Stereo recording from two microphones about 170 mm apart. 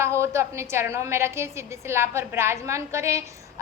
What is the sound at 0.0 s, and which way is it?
A woman's voice, 15° right (ahead or behind).